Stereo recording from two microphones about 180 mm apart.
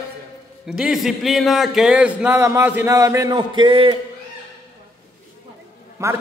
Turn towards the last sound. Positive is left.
turn(degrees=-15)  # may be behind; listen again after turning